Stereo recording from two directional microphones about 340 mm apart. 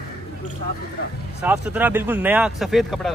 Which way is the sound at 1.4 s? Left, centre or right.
Centre.